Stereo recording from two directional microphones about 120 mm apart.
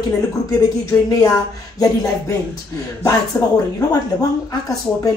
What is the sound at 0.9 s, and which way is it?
A woman's voice, 25° left (ahead or behind).